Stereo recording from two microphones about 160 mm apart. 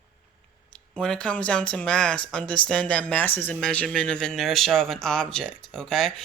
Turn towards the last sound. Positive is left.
turn(degrees=5)  # may be behind; listen again after turning